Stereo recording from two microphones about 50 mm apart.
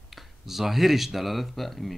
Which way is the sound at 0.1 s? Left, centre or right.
Centre.